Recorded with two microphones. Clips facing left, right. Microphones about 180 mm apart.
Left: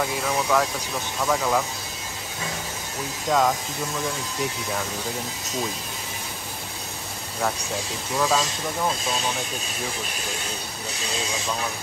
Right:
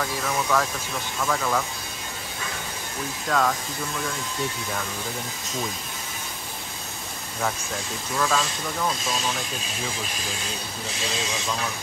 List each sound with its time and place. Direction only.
0.0 s speech: 10° left (ahead or behind)
3.3 s speech: 15° left (ahead or behind)
8.2 s speech: 15° left (ahead or behind)